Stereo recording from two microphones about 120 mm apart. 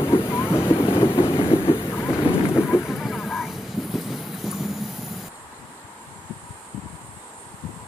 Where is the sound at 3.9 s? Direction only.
Centre (ahead or behind).